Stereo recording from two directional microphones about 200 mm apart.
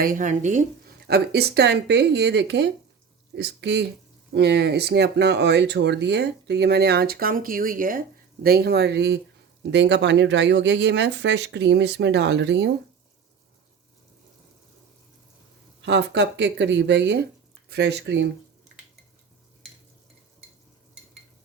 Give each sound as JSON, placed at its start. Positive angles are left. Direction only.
{"t": 0.0, "sound": "speech", "side_deg": -40}
{"t": 1.0, "sound": "speech", "side_deg": -55}
{"t": 15.8, "sound": "speech", "side_deg": -60}